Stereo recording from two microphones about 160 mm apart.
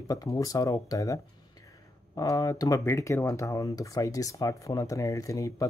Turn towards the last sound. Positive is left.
turn(degrees=20)  # may be behind; listen again after turning